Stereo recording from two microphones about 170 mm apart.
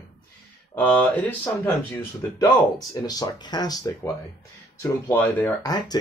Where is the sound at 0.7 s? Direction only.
10° left (ahead or behind).